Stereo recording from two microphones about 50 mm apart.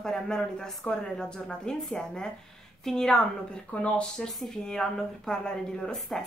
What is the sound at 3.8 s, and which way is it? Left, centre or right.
Speech, left.